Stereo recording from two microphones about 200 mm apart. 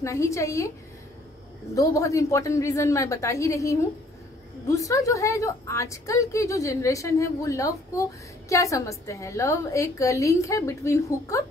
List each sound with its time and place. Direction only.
0.0 s a woman's voice: 15° left (ahead or behind)
1.8 s a woman's voice: 15° left (ahead or behind)